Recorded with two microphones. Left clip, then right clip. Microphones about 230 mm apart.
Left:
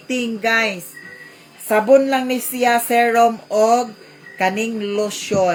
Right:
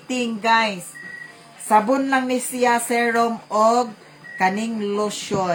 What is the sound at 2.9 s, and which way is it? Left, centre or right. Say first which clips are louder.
Speech: left 5 dB; centre.